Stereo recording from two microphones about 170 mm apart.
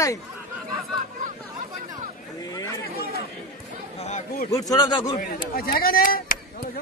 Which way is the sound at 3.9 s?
40° left (ahead or behind).